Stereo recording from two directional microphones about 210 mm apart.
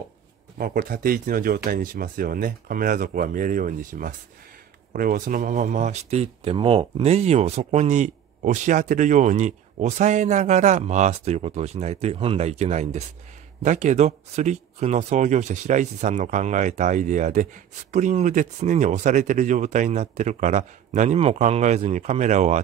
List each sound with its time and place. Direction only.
0.6 s speech: 45° right (ahead or behind)